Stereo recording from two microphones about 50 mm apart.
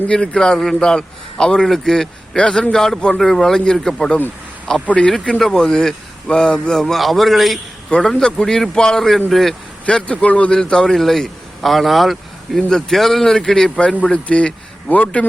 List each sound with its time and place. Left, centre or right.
0.3 s a man's voice: centre
7.0 s a man's voice: centre
8.2 s a man's voice: centre
9.8 s a man's voice: left
10.6 s a man's voice: centre
13.7 s a man's voice: left